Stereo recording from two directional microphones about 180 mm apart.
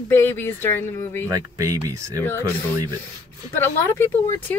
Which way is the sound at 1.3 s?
20° right (ahead or behind).